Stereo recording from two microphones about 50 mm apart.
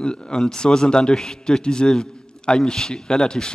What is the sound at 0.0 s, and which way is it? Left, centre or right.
A man's voice, centre.